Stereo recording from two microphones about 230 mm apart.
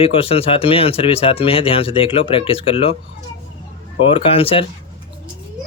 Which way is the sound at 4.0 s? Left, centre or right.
Left.